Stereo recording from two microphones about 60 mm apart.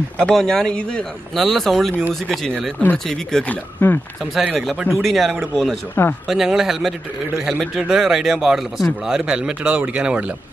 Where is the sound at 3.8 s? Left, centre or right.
Left.